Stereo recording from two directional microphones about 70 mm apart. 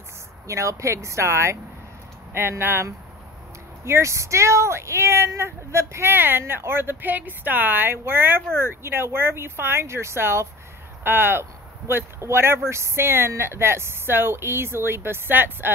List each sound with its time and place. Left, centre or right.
0.5 s speech: right
6.1 s speech: right